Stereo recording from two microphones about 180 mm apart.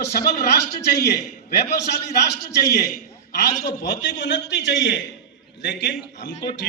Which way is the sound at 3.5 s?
50° left (ahead or behind).